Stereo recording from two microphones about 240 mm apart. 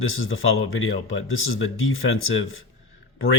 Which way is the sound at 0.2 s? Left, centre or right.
Left.